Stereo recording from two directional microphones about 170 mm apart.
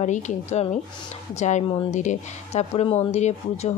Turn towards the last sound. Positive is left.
turn(degrees=40)  # may be behind; listen again after turning